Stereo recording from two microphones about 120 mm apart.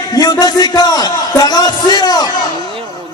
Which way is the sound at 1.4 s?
30° left (ahead or behind).